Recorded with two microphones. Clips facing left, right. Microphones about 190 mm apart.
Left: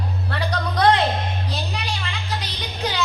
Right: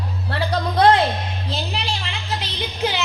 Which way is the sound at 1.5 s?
25° right (ahead or behind).